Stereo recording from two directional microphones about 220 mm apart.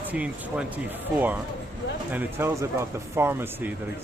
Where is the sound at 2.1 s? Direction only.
10° right (ahead or behind).